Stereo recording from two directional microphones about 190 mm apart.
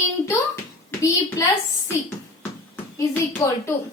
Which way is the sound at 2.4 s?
15° left (ahead or behind).